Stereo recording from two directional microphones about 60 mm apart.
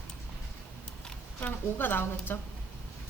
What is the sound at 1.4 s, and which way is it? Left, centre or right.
A woman's voice, left.